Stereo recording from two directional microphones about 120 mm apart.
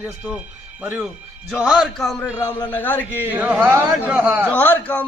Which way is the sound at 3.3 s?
15° right (ahead or behind).